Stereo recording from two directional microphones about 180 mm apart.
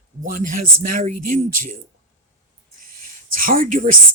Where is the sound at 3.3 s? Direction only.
50° right (ahead or behind).